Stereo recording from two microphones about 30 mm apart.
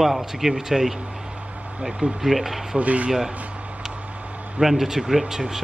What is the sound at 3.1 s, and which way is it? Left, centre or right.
Speech, centre.